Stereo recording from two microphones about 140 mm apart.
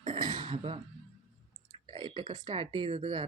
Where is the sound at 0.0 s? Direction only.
35° right (ahead or behind).